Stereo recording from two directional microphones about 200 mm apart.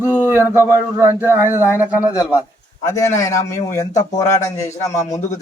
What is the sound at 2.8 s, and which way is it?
A man's voice, 15° left (ahead or behind).